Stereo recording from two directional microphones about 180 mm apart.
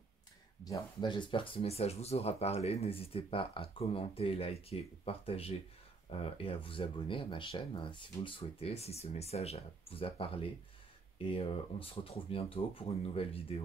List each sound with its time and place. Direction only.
0.7 s speech: 25° left (ahead or behind)